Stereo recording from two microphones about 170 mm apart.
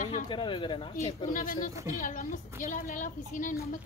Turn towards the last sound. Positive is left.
turn(degrees=50)  # may be behind; listen again after turning